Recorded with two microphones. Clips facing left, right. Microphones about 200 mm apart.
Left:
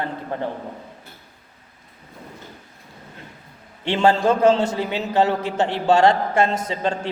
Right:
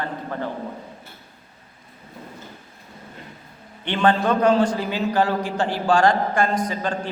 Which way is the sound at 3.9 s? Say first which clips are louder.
Left 2 dB; 25° left (ahead or behind).